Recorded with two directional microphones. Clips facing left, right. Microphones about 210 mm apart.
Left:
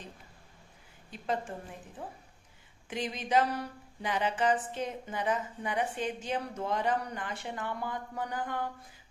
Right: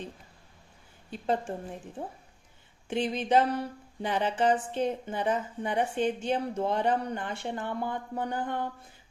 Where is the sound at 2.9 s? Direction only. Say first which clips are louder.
Right 4 dB; 30° right (ahead or behind).